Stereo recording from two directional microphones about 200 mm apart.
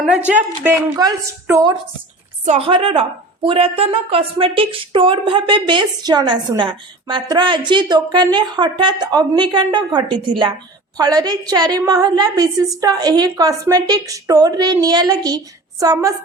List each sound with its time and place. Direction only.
0.6 s a woman's voice: 15° right (ahead or behind)
2.4 s a woman's voice: 30° right (ahead or behind)